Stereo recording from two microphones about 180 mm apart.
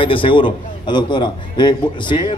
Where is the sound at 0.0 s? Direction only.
30° left (ahead or behind).